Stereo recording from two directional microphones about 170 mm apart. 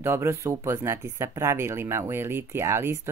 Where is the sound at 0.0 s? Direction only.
15° right (ahead or behind).